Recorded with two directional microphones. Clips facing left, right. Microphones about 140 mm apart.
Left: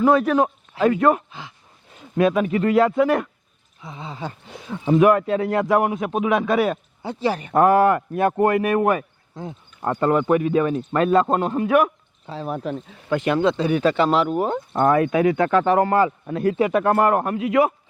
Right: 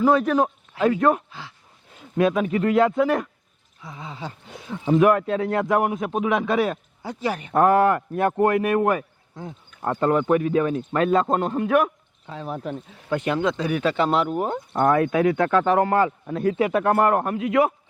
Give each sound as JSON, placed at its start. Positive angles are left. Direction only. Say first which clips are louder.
{"t": 0.1, "sound": "speech", "louder": "left 2 dB", "side_deg": 0}
{"t": 1.3, "sound": "speech", "louder": "left 1 dB", "side_deg": 20}
{"t": 2.1, "sound": "speech", "louder": "left 2 dB", "side_deg": 0}
{"t": 3.8, "sound": "a sound", "louder": "left 2 dB", "side_deg": 25}
{"t": 4.4, "sound": "speech", "louder": "left 1 dB", "side_deg": 0}
{"t": 7.0, "sound": "speech", "louder": "left 3 dB", "side_deg": 30}
{"t": 7.5, "sound": "speech", "louder": "left 1 dB", "side_deg": 5}
{"t": 12.2, "sound": "speech", "louder": "left 3 dB", "side_deg": 30}
{"t": 12.5, "sound": "speech", "louder": "left 3 dB", "side_deg": 85}
{"t": 13.4, "sound": "speech", "louder": "left 4 dB", "side_deg": 30}
{"t": 13.9, "sound": "speech", "louder": "left 2 dB", "side_deg": 90}
{"t": 14.8, "sound": "speech", "louder": "left 1 dB", "side_deg": 0}